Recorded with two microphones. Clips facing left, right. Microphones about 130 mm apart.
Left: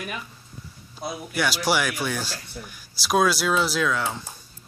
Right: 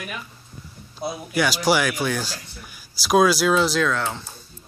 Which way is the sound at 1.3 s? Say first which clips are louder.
Right 4 dB; centre (ahead or behind).